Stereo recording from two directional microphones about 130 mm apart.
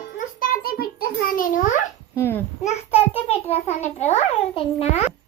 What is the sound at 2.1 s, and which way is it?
Speech, 15° left (ahead or behind).